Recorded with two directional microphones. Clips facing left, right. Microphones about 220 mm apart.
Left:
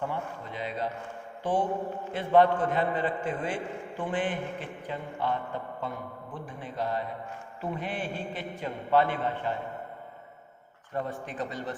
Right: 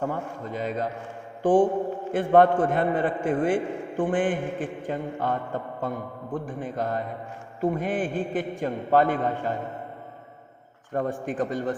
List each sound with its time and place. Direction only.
0.0 s a man's voice: 45° right (ahead or behind)
1.4 s mantra: 50° right (ahead or behind)
2.1 s a man's voice: 50° right (ahead or behind)
10.9 s a man's voice: 45° right (ahead or behind)